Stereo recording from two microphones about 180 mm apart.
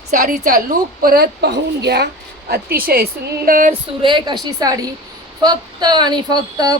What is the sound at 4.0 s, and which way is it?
Speech, 25° right (ahead or behind).